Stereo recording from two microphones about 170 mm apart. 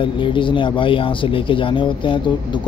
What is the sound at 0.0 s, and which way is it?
Speech, 30° left (ahead or behind).